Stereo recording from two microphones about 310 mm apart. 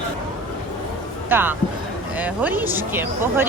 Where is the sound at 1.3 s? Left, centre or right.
Centre.